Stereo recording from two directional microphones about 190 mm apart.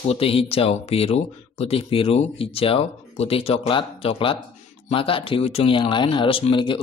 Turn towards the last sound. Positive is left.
turn(degrees=25)  # may be behind; listen again after turning